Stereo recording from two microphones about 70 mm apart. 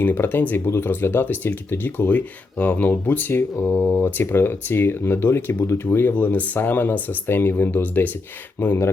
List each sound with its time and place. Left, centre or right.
0.0 s speech: left